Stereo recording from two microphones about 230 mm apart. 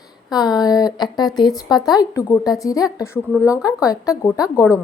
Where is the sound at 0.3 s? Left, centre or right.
Centre.